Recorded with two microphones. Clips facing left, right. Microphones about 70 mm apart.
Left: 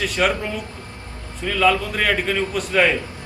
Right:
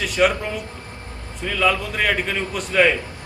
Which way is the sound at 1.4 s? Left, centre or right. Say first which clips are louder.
Left 2 dB; centre.